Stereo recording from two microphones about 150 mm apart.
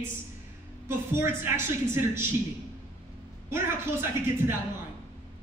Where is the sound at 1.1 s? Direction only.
15° right (ahead or behind).